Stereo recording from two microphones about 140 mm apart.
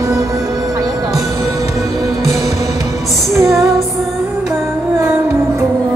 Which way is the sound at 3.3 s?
Centre (ahead or behind).